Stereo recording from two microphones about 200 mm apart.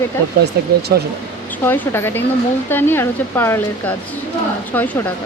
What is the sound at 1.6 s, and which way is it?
Speech, 10° left (ahead or behind).